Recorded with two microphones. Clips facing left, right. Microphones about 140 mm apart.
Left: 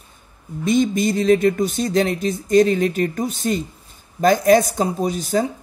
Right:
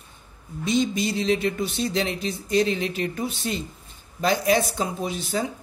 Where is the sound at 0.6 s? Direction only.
50° left (ahead or behind).